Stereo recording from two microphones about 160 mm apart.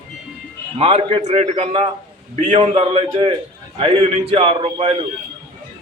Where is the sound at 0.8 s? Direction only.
40° right (ahead or behind).